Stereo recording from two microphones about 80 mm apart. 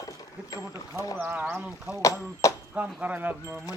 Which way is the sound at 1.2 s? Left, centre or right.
Right.